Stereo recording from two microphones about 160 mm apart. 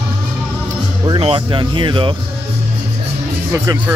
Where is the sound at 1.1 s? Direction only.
35° right (ahead or behind).